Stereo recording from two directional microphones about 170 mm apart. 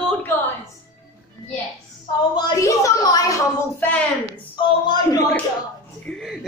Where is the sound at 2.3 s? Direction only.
20° left (ahead or behind).